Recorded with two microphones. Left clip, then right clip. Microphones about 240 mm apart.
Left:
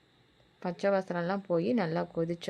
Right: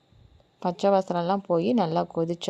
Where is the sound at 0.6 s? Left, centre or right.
Centre.